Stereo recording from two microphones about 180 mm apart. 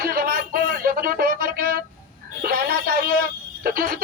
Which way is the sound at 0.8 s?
55° right (ahead or behind).